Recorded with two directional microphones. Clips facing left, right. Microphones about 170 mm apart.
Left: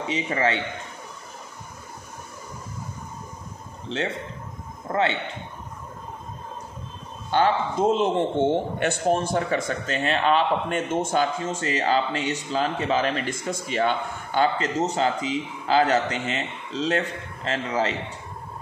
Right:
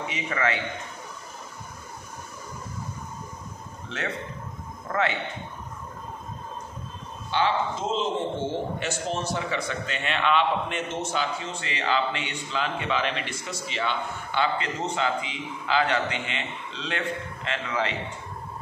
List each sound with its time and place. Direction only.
0.0 s a man's voice: 30° left (ahead or behind)
4.8 s a man's voice: 30° left (ahead or behind)
7.2 s a man's voice: 45° left (ahead or behind)